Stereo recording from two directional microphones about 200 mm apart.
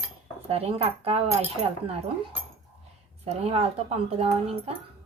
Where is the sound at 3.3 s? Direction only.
30° right (ahead or behind).